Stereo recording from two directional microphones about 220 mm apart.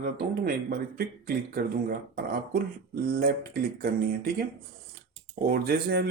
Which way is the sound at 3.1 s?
45° right (ahead or behind).